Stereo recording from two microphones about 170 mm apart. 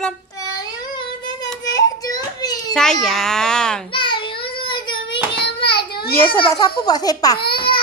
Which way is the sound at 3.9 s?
30° left (ahead or behind).